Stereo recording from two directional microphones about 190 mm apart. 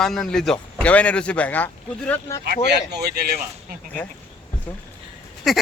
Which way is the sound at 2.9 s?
55° right (ahead or behind).